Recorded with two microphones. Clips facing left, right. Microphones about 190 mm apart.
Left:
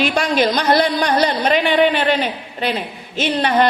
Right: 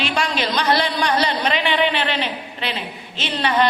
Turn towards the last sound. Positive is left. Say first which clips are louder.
# left 4 dB
turn(degrees=50)  # may be behind; listen again after turning